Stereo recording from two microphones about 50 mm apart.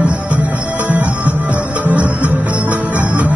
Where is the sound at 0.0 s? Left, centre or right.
Right.